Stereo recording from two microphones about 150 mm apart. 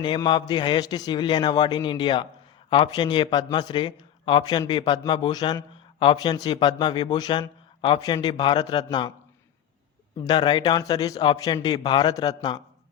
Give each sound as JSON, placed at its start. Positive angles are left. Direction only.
{"t": 0.0, "sound": "a man's voice", "side_deg": 30}
{"t": 10.2, "sound": "a man's voice", "side_deg": 30}